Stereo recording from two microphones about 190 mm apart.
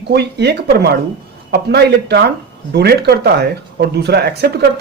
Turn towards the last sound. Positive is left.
turn(degrees=-60)  # may be behind; listen again after turning